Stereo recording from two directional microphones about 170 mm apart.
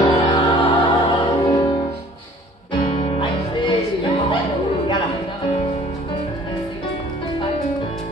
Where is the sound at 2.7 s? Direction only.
30° left (ahead or behind).